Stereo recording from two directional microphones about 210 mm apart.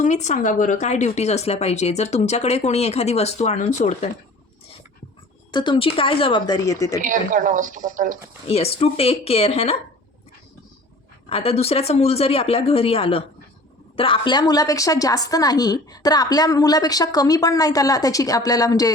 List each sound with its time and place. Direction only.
0.0 s speech: 35° left (ahead or behind)
5.5 s speech: 20° left (ahead or behind)
7.0 s a woman's voice: 40° right (ahead or behind)
8.4 s speech: 30° left (ahead or behind)
11.3 s a woman's voice: 25° left (ahead or behind)